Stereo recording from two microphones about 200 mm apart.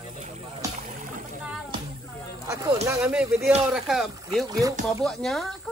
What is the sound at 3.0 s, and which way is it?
Speech, 5° right (ahead or behind).